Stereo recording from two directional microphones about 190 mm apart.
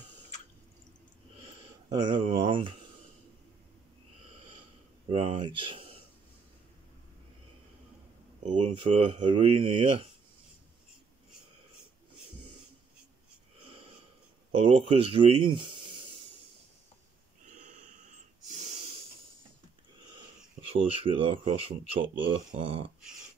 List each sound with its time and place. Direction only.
1.4 s a sound: 30° right (ahead or behind)
2.4 s speech: 25° right (ahead or behind)
4.5 s a sound: 30° right (ahead or behind)
8.4 s speech: 35° right (ahead or behind)
14.5 s speech: 30° right (ahead or behind)
17.5 s wheeze: 40° right (ahead or behind)
20.7 s speech: 30° right (ahead or behind)